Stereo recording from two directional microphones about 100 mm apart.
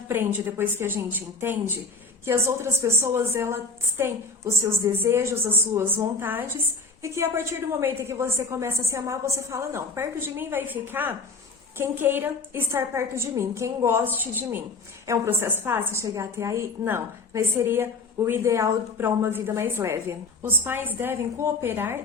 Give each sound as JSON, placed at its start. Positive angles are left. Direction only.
{"t": 0.1, "sound": "a woman's voice", "side_deg": -20}
{"t": 15.0, "sound": "a woman's voice", "side_deg": -30}